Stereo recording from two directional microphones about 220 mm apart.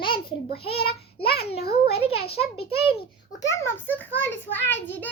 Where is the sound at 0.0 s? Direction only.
20° left (ahead or behind).